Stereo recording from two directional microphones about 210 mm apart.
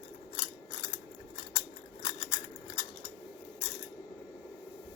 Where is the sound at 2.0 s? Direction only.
20° left (ahead or behind).